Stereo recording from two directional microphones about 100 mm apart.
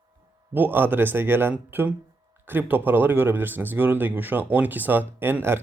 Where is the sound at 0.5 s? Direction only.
20° right (ahead or behind).